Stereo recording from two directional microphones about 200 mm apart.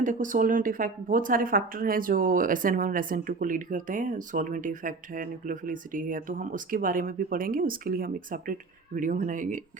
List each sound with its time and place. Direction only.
0.0 s speech: 40° right (ahead or behind)